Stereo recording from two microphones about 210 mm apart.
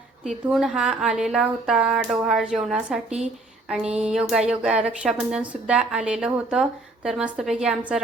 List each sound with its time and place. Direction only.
0.3 s speech: centre (ahead or behind)